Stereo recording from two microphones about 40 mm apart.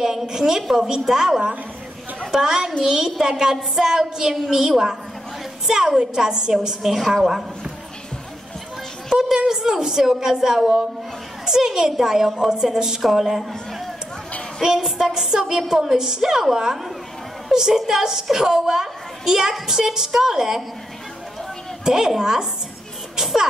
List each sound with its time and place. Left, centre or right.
0.0 s a woman's voice: centre
9.1 s a woman's voice: centre
14.6 s a woman's voice: centre
21.8 s a woman's voice: centre